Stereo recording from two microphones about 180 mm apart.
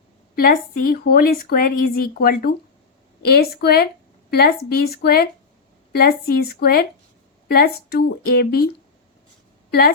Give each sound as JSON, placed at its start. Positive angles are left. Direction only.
{"t": 0.3, "sound": "a woman's voice", "side_deg": 50}